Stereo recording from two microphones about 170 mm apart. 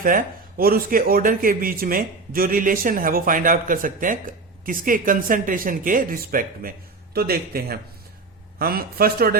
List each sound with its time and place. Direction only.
0.0 s speech: 55° right (ahead or behind)